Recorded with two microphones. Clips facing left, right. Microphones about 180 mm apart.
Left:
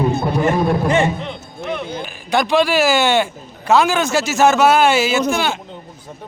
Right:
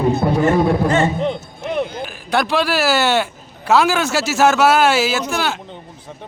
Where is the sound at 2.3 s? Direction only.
5° right (ahead or behind).